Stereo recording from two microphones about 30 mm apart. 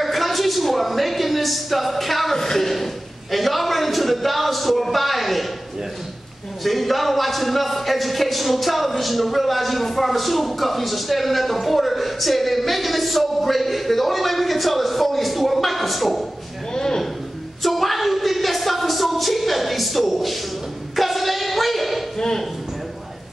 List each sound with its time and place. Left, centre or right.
0.0 s a woman's voice: centre
2.3 s speech: centre
2.7 s speech: centre
6.6 s speech: centre
16.7 s a sound: centre
17.6 s a sound: centre